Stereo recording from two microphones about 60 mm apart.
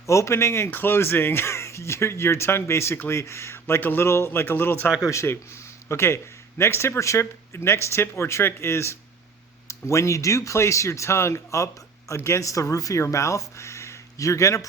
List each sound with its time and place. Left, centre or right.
0.0 s speech: left
0.7 s speech: left
3.8 s speech: left
4.0 s speech: left
4.3 s speech: left
5.0 s speech: left